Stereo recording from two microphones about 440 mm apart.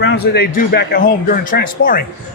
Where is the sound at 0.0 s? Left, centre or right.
Left.